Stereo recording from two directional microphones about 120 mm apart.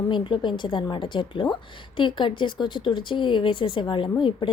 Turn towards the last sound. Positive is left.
turn(degrees=45)  # may be behind; listen again after turning